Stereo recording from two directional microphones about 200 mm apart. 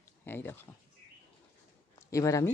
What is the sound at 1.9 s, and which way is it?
Speech, 15° left (ahead or behind).